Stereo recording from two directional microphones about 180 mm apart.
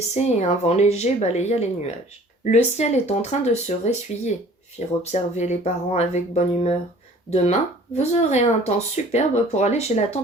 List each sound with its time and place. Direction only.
0.1 s speech: 40° left (ahead or behind)